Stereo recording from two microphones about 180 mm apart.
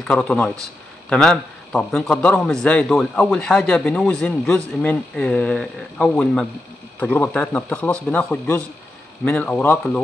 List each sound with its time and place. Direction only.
0.0 s a man's voice: 5° left (ahead or behind)